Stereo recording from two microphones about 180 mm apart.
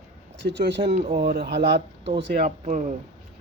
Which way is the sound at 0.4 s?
75° right (ahead or behind).